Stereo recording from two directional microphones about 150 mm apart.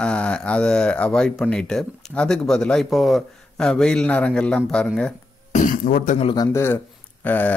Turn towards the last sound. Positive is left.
turn(degrees=10)  # may be behind; listen again after turning